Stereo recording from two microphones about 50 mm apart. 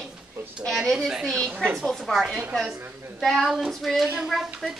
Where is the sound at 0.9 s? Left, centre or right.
Centre.